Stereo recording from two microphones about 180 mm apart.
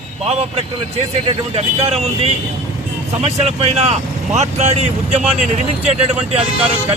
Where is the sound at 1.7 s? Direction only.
35° right (ahead or behind).